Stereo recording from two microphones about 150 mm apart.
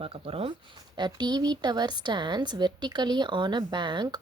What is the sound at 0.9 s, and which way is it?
A woman's voice, 30° right (ahead or behind).